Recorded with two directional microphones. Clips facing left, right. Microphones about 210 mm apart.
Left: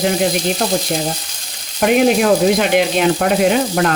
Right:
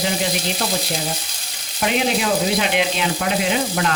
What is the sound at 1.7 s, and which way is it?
Frying, 50° left (ahead or behind).